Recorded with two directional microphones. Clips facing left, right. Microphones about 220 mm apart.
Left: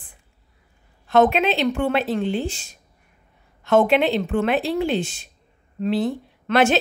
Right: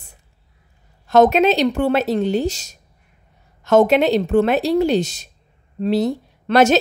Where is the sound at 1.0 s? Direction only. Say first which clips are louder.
Right 4 dB; 40° right (ahead or behind).